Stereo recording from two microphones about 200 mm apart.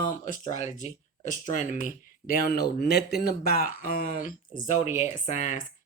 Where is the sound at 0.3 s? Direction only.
40° left (ahead or behind).